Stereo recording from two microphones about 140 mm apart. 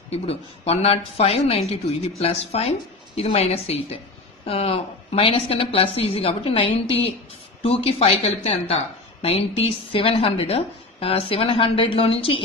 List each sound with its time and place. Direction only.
0.1 s speech: 45° left (ahead or behind)